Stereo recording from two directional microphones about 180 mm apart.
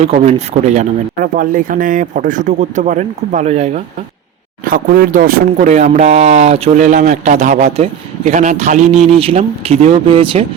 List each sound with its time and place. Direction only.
0.0 s speech: 35° right (ahead or behind)
4.6 s speech: 50° right (ahead or behind); by 10.4 s 30° right (ahead or behind)